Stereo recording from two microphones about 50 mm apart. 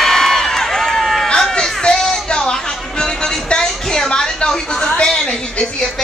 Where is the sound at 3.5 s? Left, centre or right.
Centre.